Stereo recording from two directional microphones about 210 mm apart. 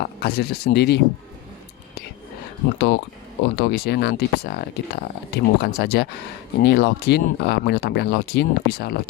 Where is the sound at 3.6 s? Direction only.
50° left (ahead or behind).